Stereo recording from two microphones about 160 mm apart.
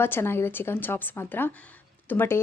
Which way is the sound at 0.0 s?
15° left (ahead or behind).